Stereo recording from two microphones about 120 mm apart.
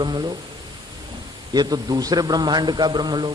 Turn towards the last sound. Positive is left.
turn(degrees=-40)  # may be behind; listen again after turning